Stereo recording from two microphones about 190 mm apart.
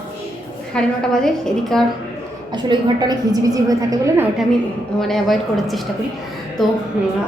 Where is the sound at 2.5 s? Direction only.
20° right (ahead or behind).